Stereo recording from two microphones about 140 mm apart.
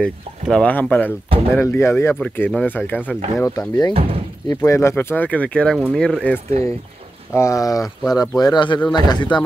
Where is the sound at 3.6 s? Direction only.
25° left (ahead or behind); by 6.3 s 5° left (ahead or behind).